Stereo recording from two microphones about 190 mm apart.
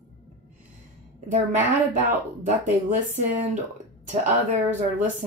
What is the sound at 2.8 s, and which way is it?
A woman's voice, 40° right (ahead or behind).